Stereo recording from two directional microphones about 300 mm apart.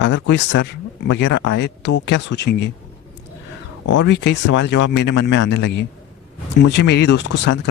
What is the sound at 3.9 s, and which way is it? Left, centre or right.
Speech, left.